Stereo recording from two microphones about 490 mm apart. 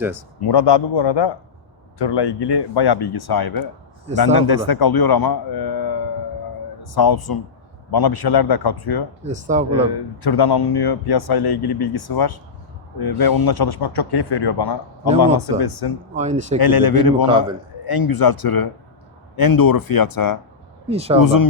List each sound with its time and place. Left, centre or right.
0.3 s a man's voice: left
9.2 s speech: centre
10.2 s speech: left
16.1 s speech: centre
16.6 s speech: left
20.9 s speech: centre
21.2 s speech: left